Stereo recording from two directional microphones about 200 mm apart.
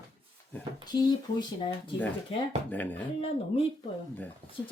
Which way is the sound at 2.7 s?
10° left (ahead or behind).